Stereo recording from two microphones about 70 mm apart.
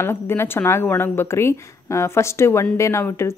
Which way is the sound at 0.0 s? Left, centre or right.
Left.